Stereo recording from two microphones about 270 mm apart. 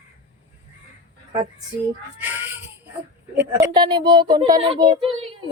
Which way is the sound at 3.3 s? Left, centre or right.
Centre.